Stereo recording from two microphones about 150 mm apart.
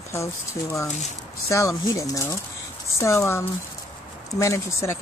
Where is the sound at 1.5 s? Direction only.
20° left (ahead or behind).